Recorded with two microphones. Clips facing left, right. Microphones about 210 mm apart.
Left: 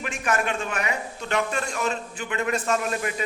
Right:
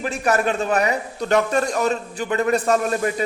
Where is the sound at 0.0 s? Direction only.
35° right (ahead or behind).